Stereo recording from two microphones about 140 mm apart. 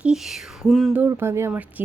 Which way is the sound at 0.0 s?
5° right (ahead or behind).